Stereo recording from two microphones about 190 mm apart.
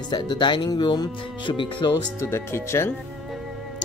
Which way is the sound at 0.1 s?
25° left (ahead or behind).